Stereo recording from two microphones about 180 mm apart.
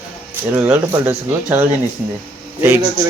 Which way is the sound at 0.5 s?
10° right (ahead or behind).